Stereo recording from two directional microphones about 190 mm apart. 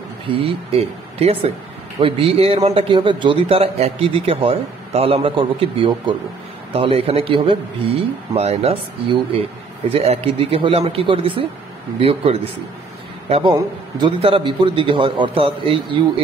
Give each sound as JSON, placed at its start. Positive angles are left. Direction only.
{"t": 0.5, "sound": "a man's voice", "side_deg": -30}